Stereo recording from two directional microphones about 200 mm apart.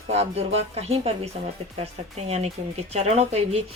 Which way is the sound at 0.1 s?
30° right (ahead or behind).